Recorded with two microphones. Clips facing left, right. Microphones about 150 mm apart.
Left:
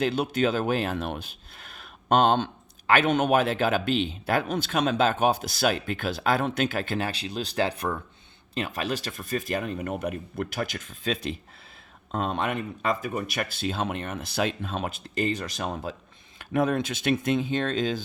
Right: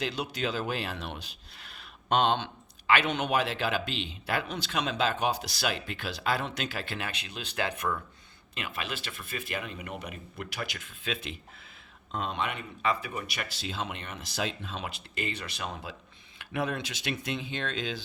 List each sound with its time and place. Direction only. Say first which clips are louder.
0.0 s speech: left 8 dB; 55° left (ahead or behind)